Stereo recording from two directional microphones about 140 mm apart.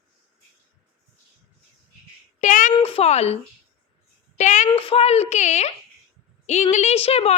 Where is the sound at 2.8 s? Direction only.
45° left (ahead or behind).